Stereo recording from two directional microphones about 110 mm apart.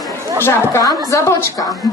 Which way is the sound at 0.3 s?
20° left (ahead or behind).